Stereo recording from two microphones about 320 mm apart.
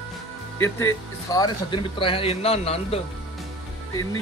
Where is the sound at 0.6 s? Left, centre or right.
Centre.